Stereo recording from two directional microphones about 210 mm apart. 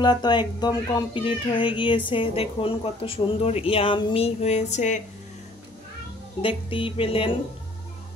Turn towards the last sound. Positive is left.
turn(degrees=25)  # may be behind; listen again after turning